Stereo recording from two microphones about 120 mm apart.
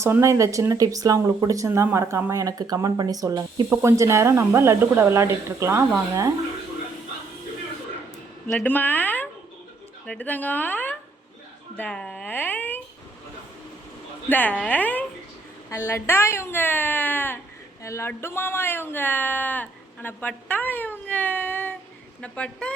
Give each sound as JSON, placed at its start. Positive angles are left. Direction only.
{"t": 0.0, "sound": "speech", "side_deg": -25}
{"t": 8.6, "sound": "speech", "side_deg": 15}
{"t": 14.3, "sound": "speech", "side_deg": 15}